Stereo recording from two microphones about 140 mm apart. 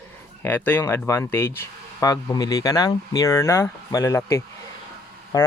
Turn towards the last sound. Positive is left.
turn(degrees=25)  # may be behind; listen again after turning